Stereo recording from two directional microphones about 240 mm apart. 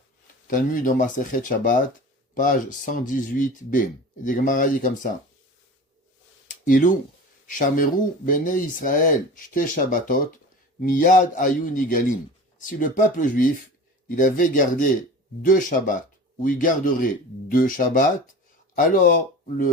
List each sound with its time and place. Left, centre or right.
0.4 s speech: left
6.5 s a sound: left
7.4 s speech: left